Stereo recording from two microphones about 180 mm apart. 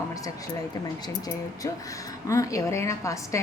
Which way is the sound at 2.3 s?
20° left (ahead or behind).